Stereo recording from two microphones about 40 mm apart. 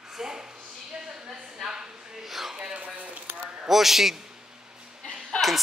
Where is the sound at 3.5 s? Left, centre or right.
Centre.